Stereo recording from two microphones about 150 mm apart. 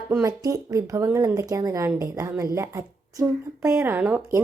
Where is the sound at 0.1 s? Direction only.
20° right (ahead or behind).